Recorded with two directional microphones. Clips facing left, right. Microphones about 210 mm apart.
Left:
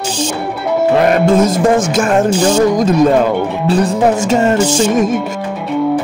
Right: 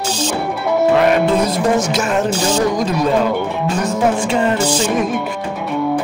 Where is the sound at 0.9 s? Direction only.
45° left (ahead or behind).